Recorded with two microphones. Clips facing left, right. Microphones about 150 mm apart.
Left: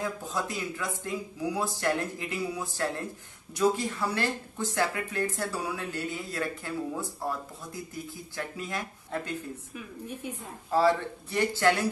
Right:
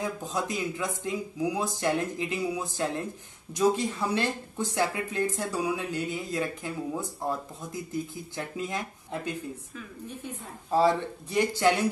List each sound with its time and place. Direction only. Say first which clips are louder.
0.0 s speech: right 1 dB; 20° right (ahead or behind)
8.4 s speech: right 2 dB; 20° right (ahead or behind)
10.7 s speech: right 1 dB; 15° right (ahead or behind)